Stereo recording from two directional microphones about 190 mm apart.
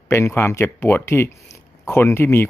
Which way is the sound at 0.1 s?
10° left (ahead or behind).